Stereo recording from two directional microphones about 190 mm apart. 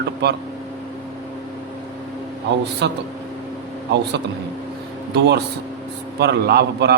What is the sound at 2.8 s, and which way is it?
Speech, 65° right (ahead or behind).